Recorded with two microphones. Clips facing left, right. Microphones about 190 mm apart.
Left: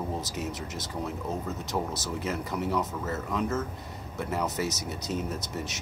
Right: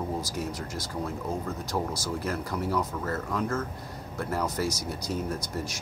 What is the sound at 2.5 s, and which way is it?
Speech, 5° left (ahead or behind).